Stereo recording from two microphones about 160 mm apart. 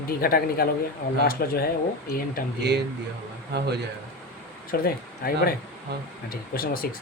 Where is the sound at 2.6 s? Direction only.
90° right.